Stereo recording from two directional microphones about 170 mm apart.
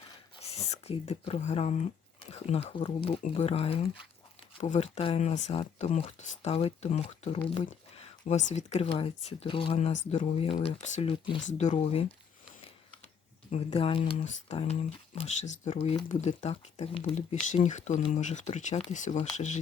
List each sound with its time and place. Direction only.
0.4 s speech: 35° left (ahead or behind)
13.5 s speech: 40° left (ahead or behind)